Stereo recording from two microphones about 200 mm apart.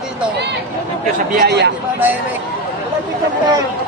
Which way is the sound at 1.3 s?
50° right (ahead or behind).